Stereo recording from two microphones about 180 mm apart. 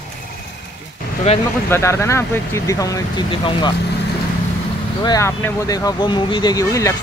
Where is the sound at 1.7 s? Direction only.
15° left (ahead or behind).